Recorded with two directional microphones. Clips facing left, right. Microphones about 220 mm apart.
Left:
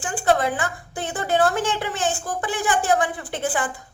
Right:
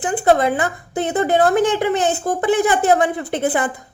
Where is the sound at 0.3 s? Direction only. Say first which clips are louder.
Right 6 dB; 20° right (ahead or behind).